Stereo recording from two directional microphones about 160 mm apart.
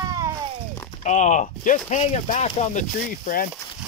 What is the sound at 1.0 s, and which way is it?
Speech, 45° left (ahead or behind).